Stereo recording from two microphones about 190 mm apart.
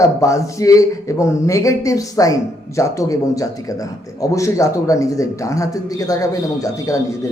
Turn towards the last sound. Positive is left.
turn(degrees=15)  # may be behind; listen again after turning